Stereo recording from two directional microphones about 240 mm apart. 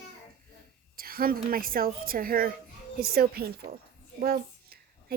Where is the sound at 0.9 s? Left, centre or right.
Right.